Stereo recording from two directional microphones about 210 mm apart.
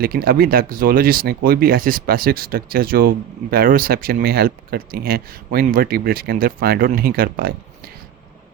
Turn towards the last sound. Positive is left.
turn(degrees=-45)  # may be behind; listen again after turning